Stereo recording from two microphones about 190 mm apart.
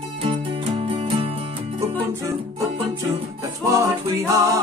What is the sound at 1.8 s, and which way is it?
Music, 15° right (ahead or behind).